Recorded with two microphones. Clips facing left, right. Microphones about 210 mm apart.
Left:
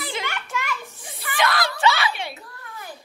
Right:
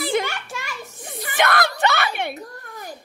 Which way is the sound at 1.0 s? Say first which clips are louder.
Right 4 dB; 50° right (ahead or behind).